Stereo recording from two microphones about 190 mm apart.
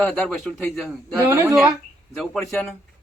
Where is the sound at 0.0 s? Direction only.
5° left (ahead or behind).